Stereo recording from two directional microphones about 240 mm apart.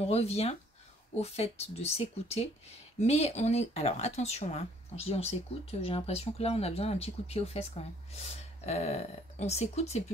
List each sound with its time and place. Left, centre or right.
0.0 s speech: left